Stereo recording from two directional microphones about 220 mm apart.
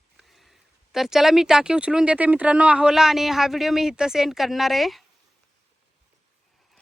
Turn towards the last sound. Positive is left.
turn(degrees=0)  # may be behind; listen again after turning